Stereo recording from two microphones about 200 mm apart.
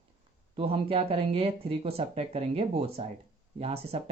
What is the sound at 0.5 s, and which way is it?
Speech, 30° right (ahead or behind).